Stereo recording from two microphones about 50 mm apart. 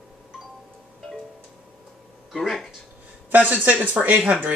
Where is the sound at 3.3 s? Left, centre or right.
Right.